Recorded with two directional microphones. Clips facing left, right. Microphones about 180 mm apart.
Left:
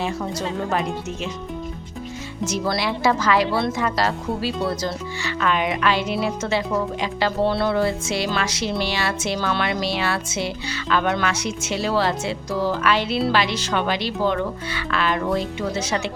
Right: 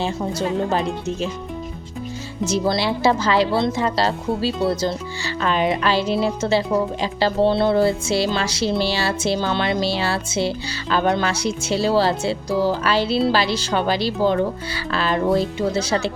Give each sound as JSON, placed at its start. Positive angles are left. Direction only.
{"t": 0.0, "sound": "speech", "side_deg": -30}
{"t": 2.5, "sound": "speech", "side_deg": -30}